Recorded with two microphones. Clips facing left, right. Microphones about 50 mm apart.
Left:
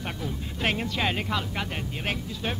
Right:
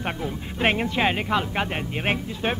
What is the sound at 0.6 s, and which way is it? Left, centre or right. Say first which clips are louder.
Music: right 5 dB; right.